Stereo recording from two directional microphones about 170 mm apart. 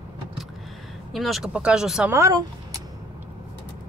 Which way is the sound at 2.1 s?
20° right (ahead or behind).